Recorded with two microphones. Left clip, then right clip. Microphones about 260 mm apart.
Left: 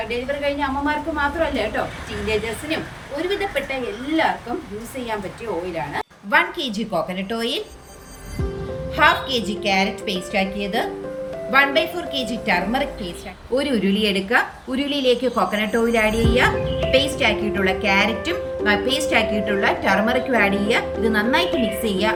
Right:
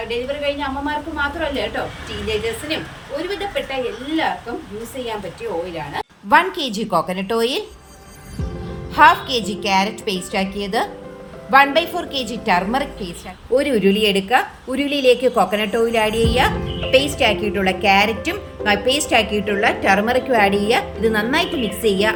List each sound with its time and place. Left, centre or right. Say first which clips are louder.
0.1 s a woman's voice: right 3 dB; centre
3.2 s a woman's voice: left 2 dB; centre
5.7 s a woman's voice: even; centre
6.3 s a woman's voice: right 4 dB; centre
9.0 s a woman's voice: right 5 dB; centre